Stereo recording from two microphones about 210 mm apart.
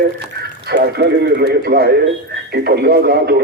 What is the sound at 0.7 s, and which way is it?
A man's voice, 50° right (ahead or behind).